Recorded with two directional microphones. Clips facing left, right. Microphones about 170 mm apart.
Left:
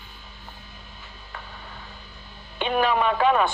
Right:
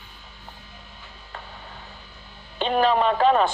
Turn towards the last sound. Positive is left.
turn(degrees=-35)  # may be behind; listen again after turning